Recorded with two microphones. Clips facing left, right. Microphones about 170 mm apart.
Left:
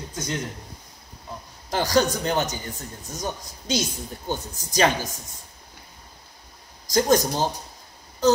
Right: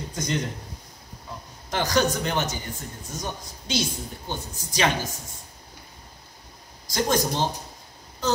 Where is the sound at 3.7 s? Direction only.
40° left (ahead or behind).